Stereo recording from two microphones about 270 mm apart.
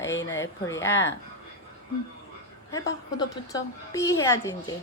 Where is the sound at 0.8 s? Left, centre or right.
Left.